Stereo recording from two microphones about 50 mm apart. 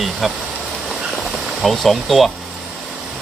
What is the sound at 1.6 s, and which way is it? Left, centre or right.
Speech, centre.